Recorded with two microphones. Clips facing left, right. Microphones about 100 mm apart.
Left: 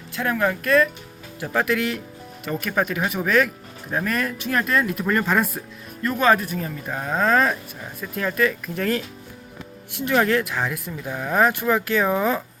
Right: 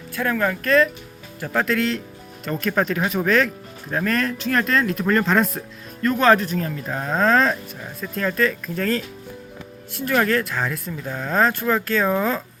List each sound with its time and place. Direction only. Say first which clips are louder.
0.2 s speech: even; 15° left (ahead or behind)